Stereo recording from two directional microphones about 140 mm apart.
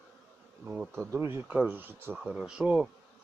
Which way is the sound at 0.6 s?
15° right (ahead or behind).